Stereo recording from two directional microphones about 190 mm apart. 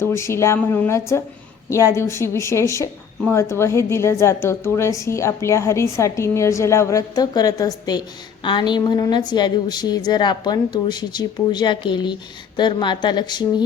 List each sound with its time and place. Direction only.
0.0 s a woman's voice: 15° left (ahead or behind)